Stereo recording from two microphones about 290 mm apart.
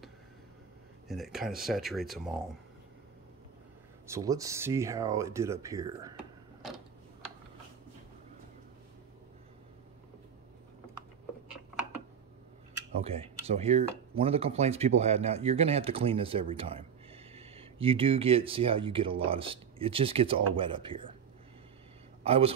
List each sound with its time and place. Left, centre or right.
1.0 s speech: centre
4.1 s speech: centre
12.9 s speech: right
22.2 s a man's voice: centre